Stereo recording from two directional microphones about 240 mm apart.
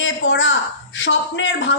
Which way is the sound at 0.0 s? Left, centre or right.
Left.